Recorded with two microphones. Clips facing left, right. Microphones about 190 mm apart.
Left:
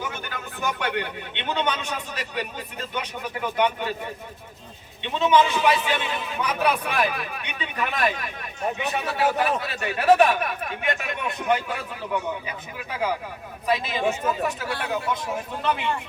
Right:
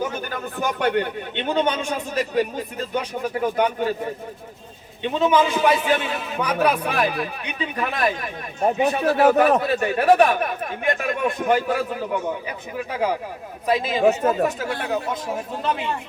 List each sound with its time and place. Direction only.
0.0 s a sound: 40° right (ahead or behind)
0.8 s a man's voice: 45° right (ahead or behind)
9.0 s a man's voice: 55° right (ahead or behind)